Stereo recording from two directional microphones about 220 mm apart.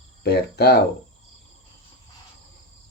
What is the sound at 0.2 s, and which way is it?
Speech, 45° left (ahead or behind).